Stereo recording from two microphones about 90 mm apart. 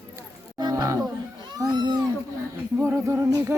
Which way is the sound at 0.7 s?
40° right (ahead or behind).